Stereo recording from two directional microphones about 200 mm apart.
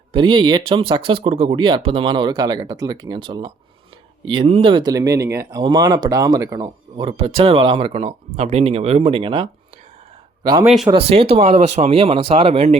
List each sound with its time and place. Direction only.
0.1 s speech: 25° right (ahead or behind)